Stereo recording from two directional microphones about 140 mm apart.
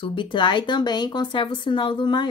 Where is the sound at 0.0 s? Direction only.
35° left (ahead or behind).